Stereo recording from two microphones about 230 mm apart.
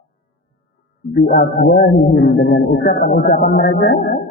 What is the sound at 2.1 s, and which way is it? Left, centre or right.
Speech, left.